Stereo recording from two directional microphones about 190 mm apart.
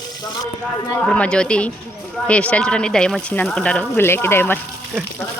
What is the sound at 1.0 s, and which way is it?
Speech, 5° left (ahead or behind).